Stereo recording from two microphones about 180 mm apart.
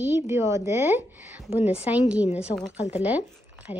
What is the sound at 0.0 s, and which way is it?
A woman's voice, 15° right (ahead or behind).